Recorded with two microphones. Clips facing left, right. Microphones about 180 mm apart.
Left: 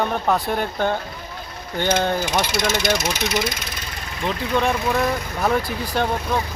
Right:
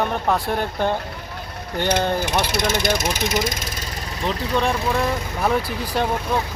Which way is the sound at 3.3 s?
45° right (ahead or behind).